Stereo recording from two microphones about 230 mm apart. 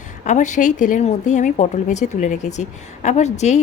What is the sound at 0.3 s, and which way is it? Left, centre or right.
Speech, left.